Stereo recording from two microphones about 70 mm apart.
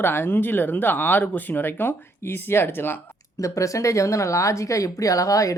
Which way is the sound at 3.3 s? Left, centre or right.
Left.